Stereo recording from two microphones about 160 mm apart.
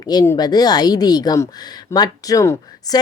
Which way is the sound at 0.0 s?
25° left (ahead or behind).